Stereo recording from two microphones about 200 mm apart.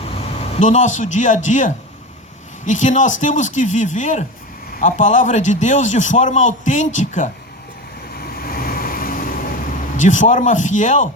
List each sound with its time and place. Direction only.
0.2 s a man's voice: 40° left (ahead or behind)
8.2 s vehicle: 50° left (ahead or behind)
10.0 s a man's voice: 40° left (ahead or behind)